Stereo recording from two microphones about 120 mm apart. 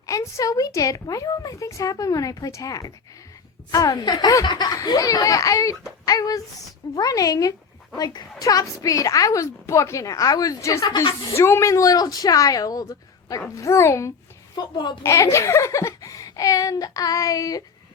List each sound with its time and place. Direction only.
0.0 s a woman's voice: 25° left (ahead or behind)
14.5 s a woman's voice: 35° left (ahead or behind)